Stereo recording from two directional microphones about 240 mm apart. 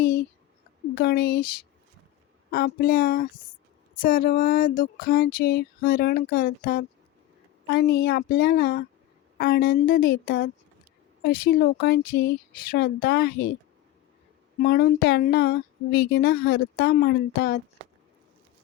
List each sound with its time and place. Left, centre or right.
0.9 s speech: left
2.5 s speech: left
14.6 s speech: left